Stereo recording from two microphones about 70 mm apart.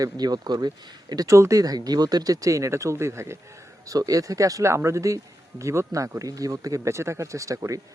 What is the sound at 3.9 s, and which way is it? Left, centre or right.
Speech, right.